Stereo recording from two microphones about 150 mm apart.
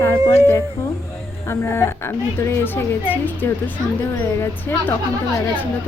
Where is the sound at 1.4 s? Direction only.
15° left (ahead or behind).